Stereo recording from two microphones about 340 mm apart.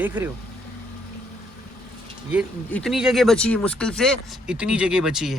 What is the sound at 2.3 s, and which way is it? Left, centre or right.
Speech, centre.